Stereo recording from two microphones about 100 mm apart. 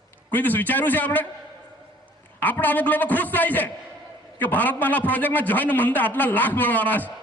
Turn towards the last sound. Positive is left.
turn(degrees=20)  # may be behind; listen again after turning